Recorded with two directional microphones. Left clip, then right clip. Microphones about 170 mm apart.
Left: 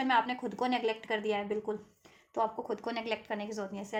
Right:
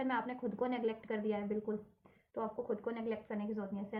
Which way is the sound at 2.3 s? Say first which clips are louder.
Left 6 dB; 50° left (ahead or behind).